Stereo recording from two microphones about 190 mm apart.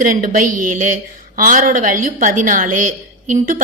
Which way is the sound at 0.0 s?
45° right (ahead or behind).